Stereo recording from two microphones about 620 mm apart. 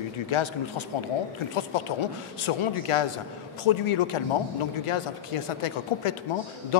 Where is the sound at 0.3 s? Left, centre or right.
Left.